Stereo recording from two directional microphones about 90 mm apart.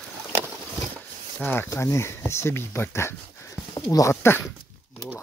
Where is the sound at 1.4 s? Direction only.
15° left (ahead or behind).